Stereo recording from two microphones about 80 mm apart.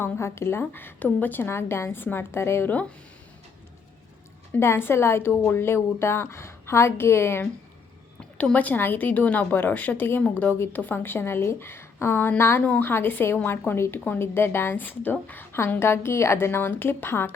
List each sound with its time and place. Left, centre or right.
0.0 s a woman's voice: left
4.5 s a woman's voice: left
8.5 s a woman's voice: left
12.6 s a woman's voice: centre
15.5 s a woman's voice: left